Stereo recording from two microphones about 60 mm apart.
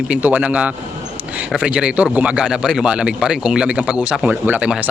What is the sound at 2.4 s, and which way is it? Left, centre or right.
A man's voice, centre.